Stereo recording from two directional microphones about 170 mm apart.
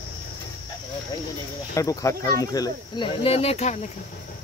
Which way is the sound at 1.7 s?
20° left (ahead or behind).